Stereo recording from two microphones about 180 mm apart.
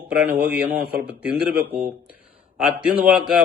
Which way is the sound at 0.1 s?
5° right (ahead or behind).